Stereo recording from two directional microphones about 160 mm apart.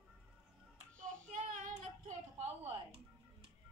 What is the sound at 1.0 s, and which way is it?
Child singing, 60° right (ahead or behind).